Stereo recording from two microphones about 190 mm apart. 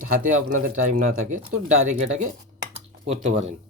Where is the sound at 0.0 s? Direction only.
45° right (ahead or behind).